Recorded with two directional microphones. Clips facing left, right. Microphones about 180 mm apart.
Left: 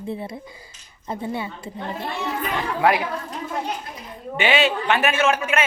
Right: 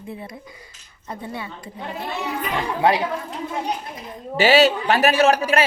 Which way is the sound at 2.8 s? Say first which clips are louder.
Even; 25° right (ahead or behind).